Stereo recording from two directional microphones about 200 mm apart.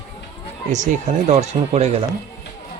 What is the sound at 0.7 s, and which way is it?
A man's voice, 35° right (ahead or behind).